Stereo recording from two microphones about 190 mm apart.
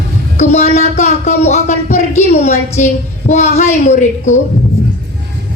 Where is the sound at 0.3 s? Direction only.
35° left (ahead or behind).